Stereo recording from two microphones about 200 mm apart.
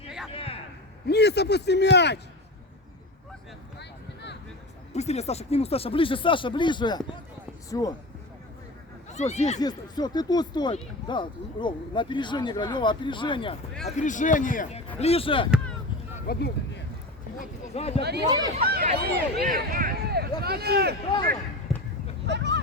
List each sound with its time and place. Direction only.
0.3 s a sound: 30° left (ahead or behind)
1.0 s a man's voice: 55° left (ahead or behind)
3.8 s a sound: 60° left (ahead or behind)
4.9 s speech: 35° left (ahead or behind); by 7.9 s 15° left (ahead or behind)
9.1 s a man's voice: 35° left (ahead or behind)
9.6 s speech: 20° left (ahead or behind)
13.8 s a man's voice: 40° left (ahead or behind)
14.9 s speech: 30° left (ahead or behind)
16.1 s speech: 45° left (ahead or behind)
17.3 s speech: 35° left (ahead or behind)
18.6 s a sound: 50° right (ahead or behind)
20.4 s speech: 50° right (ahead or behind)
21.7 s a sound: centre (ahead or behind)
22.3 s vehicle: 60° right (ahead or behind)